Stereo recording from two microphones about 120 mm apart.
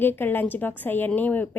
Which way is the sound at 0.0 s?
15° left (ahead or behind).